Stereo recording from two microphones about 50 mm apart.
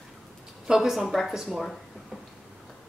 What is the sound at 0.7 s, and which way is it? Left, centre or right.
Speech, centre.